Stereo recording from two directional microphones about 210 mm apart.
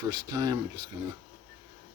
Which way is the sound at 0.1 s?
15° right (ahead or behind).